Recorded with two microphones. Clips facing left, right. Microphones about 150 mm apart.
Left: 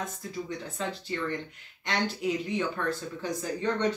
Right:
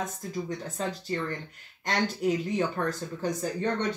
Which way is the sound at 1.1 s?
40° right (ahead or behind).